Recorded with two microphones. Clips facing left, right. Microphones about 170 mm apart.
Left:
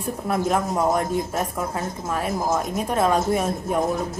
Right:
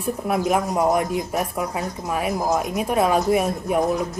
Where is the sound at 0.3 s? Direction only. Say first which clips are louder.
Right 1 dB; 15° right (ahead or behind).